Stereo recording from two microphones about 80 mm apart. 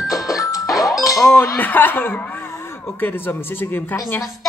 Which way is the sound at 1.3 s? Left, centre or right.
Left.